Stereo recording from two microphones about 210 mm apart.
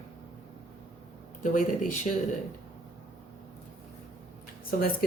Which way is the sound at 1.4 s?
40° left (ahead or behind).